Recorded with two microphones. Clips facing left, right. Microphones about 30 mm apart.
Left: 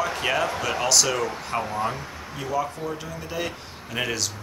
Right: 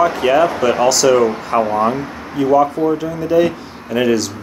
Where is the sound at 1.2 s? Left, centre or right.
Centre.